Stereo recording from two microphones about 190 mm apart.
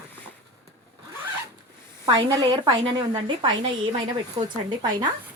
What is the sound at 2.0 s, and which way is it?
A woman's voice, 25° right (ahead or behind).